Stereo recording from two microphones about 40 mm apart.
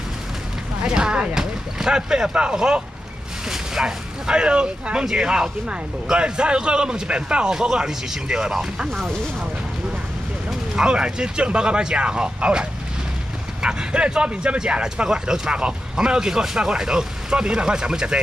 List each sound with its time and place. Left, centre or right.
0.8 s a man's voice: right
10.8 s a man's voice: centre